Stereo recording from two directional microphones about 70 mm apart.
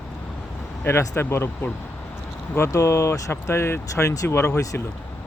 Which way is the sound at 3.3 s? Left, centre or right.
Left.